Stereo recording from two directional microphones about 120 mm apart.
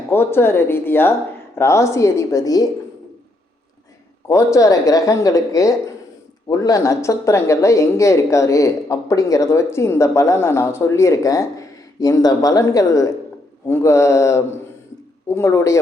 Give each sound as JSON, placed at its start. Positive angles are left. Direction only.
{"t": 0.1, "sound": "speech", "side_deg": 20}
{"t": 4.3, "sound": "speech", "side_deg": 25}